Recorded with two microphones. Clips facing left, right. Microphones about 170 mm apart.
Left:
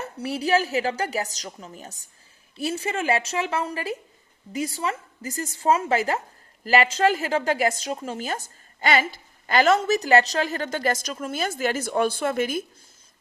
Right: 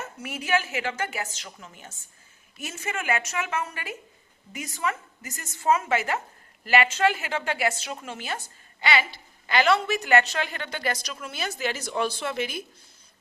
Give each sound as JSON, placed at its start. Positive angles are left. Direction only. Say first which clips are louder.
{"t": 0.0, "sound": "a woman's voice", "louder": "left 8 dB", "side_deg": 35}